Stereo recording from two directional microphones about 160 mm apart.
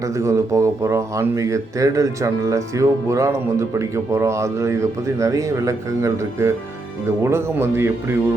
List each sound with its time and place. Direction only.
0.2 s a man's voice: 20° right (ahead or behind)